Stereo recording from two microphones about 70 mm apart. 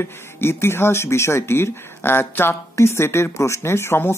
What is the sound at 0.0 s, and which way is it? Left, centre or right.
Speech, left.